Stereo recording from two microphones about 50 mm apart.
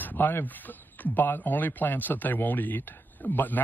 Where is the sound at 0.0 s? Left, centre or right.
Left.